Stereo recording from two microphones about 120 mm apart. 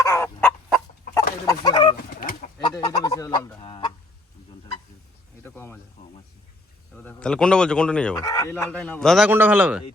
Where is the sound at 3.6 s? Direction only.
45° left (ahead or behind).